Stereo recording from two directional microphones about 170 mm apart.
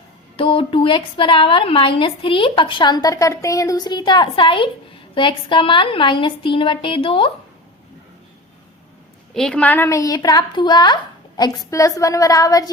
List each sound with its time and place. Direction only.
0.3 s a woman's voice: 30° left (ahead or behind)
9.3 s a woman's voice: 5° left (ahead or behind); by 12.7 s 20° left (ahead or behind)